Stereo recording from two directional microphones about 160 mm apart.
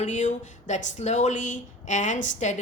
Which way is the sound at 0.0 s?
50° left (ahead or behind).